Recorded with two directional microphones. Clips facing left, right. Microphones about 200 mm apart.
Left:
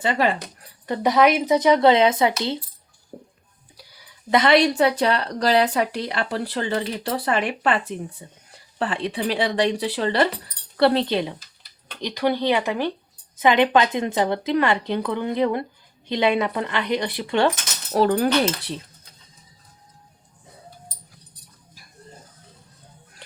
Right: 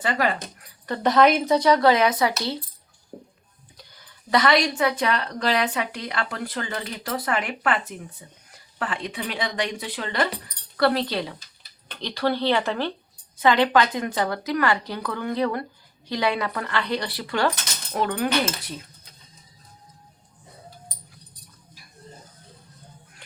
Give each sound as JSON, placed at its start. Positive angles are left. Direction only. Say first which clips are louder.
{"t": 0.0, "sound": "a woman's voice", "louder": "left 3 dB", "side_deg": 25}
{"t": 0.4, "sound": "a woman's voice", "louder": "left 2 dB", "side_deg": 15}
{"t": 3.8, "sound": "a sound", "louder": "left 1 dB", "side_deg": 10}
{"t": 4.3, "sound": "a woman's voice", "louder": "left 4 dB", "side_deg": 25}